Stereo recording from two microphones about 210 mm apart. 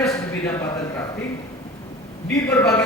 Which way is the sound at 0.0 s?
15° left (ahead or behind).